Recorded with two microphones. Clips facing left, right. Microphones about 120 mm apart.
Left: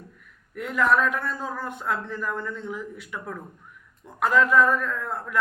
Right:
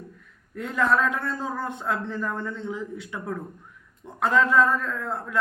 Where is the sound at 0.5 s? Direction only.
30° right (ahead or behind).